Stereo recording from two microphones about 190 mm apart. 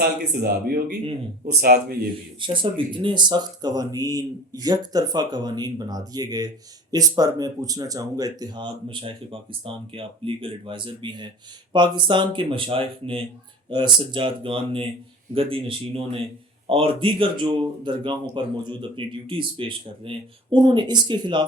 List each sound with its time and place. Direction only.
0.0 s a man's voice: 55° right (ahead or behind)
2.4 s speech: 25° right (ahead or behind)